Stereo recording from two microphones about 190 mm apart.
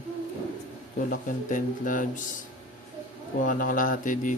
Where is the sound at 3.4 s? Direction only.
45° left (ahead or behind).